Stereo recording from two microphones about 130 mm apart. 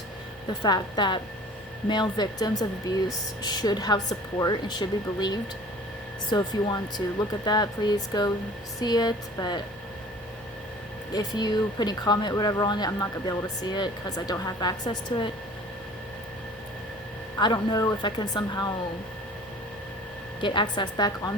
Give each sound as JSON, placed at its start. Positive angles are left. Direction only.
{"t": 0.6, "sound": "speech", "side_deg": 35}
{"t": 11.1, "sound": "speech", "side_deg": 30}
{"t": 17.4, "sound": "speech", "side_deg": 35}
{"t": 20.4, "sound": "speech", "side_deg": 35}